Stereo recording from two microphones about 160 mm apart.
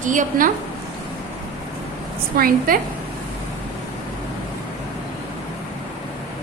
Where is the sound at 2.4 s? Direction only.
60° right (ahead or behind).